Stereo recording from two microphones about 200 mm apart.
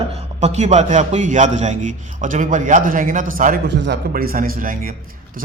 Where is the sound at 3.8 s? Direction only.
60° right (ahead or behind).